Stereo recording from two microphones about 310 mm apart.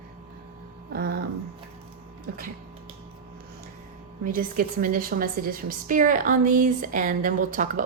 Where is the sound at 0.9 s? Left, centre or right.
Right.